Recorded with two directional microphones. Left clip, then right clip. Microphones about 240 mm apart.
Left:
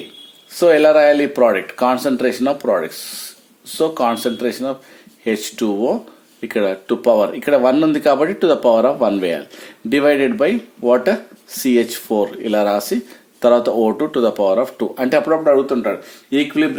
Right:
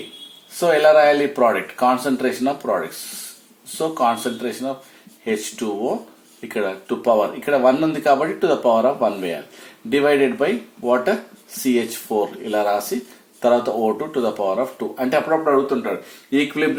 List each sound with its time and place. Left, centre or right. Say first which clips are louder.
0.5 s speech: left 3 dB; left